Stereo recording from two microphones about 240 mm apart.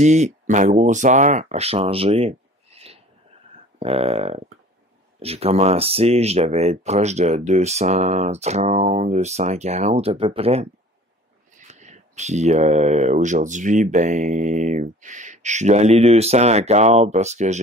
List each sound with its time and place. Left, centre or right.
0.0 s speech: right